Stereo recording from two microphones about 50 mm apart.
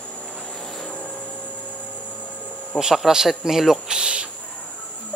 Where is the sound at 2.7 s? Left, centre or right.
Centre.